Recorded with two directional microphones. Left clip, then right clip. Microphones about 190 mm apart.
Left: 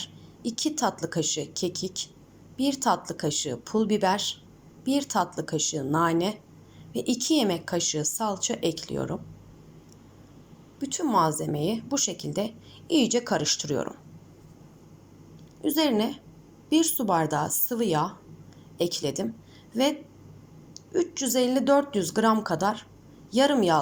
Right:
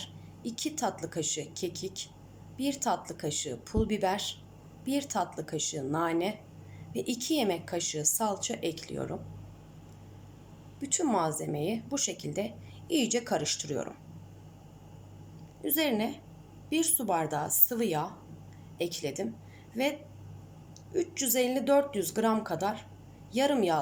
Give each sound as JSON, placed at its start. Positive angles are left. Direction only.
{"t": 0.0, "sound": "a woman's voice", "side_deg": 0}
{"t": 10.8, "sound": "a woman's voice", "side_deg": -5}
{"t": 15.6, "sound": "a woman's voice", "side_deg": 0}